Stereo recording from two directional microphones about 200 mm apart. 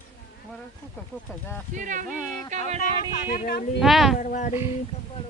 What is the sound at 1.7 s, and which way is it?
Speech, 40° right (ahead or behind).